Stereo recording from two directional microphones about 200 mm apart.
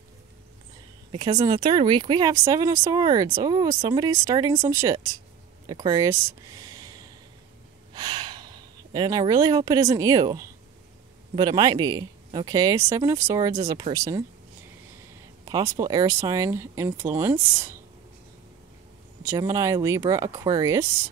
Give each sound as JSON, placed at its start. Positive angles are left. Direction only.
{"t": 1.1, "sound": "speech", "side_deg": -25}
{"t": 7.9, "sound": "gasp", "side_deg": -20}
{"t": 11.3, "sound": "speech", "side_deg": -20}
{"t": 15.4, "sound": "speech", "side_deg": -15}
{"t": 19.2, "sound": "speech", "side_deg": -15}